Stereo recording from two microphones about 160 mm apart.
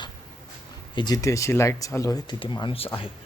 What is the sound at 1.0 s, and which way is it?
Speech, 25° left (ahead or behind).